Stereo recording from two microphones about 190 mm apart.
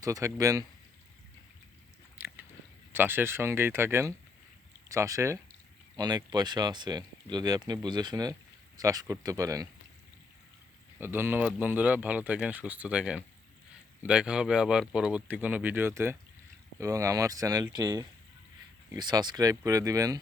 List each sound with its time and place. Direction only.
0.0 s speech: 15° right (ahead or behind)
2.1 s biting: 10° right (ahead or behind)
2.9 s speech: 10° right (ahead or behind)
11.0 s speech: 10° right (ahead or behind)